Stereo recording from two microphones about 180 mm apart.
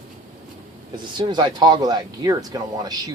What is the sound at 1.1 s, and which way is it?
Speech, 25° right (ahead or behind).